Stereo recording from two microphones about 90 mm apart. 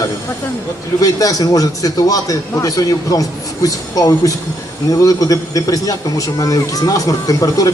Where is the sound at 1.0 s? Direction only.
40° left (ahead or behind).